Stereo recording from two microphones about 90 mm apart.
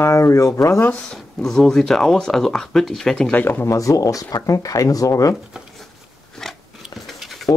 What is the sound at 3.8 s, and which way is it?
Speech, 40° left (ahead or behind).